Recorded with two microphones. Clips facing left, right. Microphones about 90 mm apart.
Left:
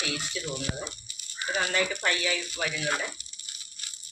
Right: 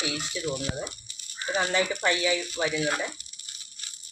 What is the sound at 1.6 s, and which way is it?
Speech, 20° right (ahead or behind).